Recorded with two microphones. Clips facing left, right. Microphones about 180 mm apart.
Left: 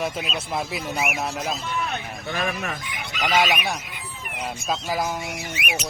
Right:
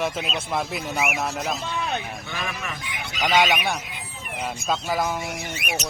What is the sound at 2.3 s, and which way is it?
Speech, 45° left (ahead or behind).